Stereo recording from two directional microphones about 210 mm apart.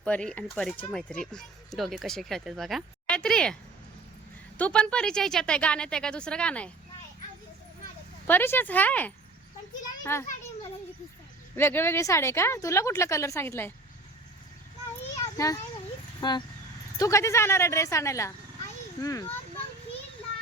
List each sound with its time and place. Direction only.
0.0 s speech: 5° left (ahead or behind)
8.3 s a child's voice: 10° left (ahead or behind)
11.5 s speech: 10° left (ahead or behind)
15.4 s speech: 15° left (ahead or behind)